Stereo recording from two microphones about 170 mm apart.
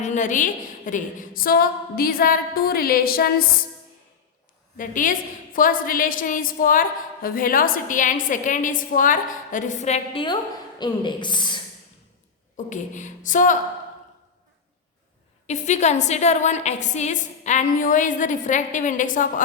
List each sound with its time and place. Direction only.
0.0 s a woman's voice: 45° left (ahead or behind)
4.8 s a woman's voice: 50° left (ahead or behind)
10.8 s a woman's voice: 25° left (ahead or behind)
12.5 s a woman's voice: 45° left (ahead or behind)
15.4 s a woman's voice: 45° left (ahead or behind)